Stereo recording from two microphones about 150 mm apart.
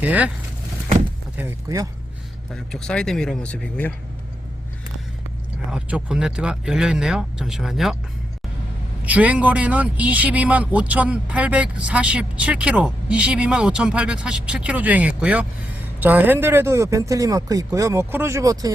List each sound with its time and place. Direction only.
0.0 s speech: 10° right (ahead or behind)
1.4 s speech: 20° right (ahead or behind)
2.5 s speech: 5° left (ahead or behind)
5.7 s speech: 5° right (ahead or behind)
9.0 s speech: 10° right (ahead or behind)